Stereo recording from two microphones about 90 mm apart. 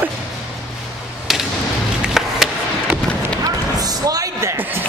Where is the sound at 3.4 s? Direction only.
45° right (ahead or behind).